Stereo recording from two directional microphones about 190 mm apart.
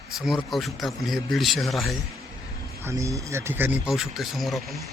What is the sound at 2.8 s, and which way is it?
Speech, 15° right (ahead or behind).